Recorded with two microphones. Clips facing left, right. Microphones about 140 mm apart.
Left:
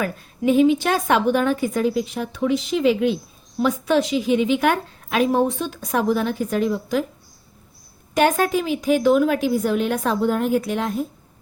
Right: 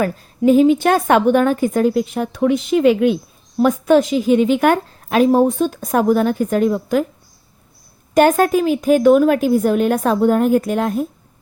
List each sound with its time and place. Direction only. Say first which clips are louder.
0.0 s a woman's voice: right 6 dB; 40° right (ahead or behind)
8.1 s a woman's voice: right 6 dB; 45° right (ahead or behind)